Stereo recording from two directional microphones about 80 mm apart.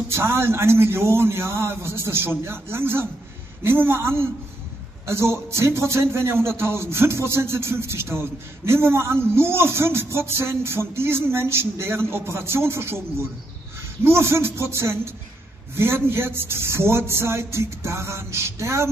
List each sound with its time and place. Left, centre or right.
0.1 s a man's voice: right